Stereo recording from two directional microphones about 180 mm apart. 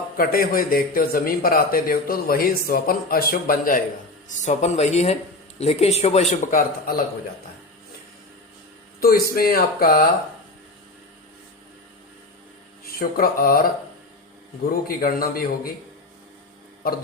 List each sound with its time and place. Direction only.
0.2 s speech: 55° left (ahead or behind)
4.3 s a man's voice: 40° left (ahead or behind)
9.0 s speech: 55° left (ahead or behind)
12.8 s speech: 55° left (ahead or behind)
14.7 s speech: 55° left (ahead or behind)